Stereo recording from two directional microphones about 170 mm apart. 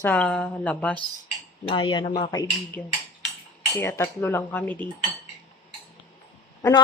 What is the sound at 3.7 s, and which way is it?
A woman's voice, 15° left (ahead or behind).